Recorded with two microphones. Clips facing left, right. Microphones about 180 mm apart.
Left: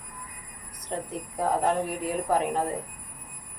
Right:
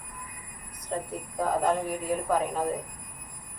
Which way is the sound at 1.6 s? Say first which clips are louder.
Left 1 dB; 70° left (ahead or behind).